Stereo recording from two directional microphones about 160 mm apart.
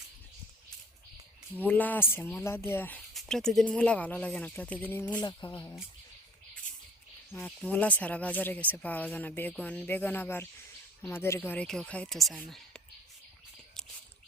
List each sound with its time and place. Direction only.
1.5 s speech: 10° left (ahead or behind)
5.2 s speech: 30° left (ahead or behind)
7.3 s speech: 10° left (ahead or behind)